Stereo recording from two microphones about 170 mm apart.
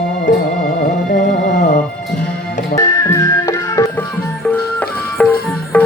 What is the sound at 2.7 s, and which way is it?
Music, 20° left (ahead or behind).